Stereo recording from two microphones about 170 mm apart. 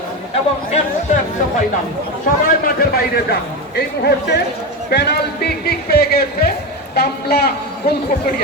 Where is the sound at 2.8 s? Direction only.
70° left (ahead or behind).